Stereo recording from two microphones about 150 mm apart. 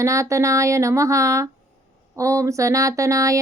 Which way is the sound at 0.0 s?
20° right (ahead or behind).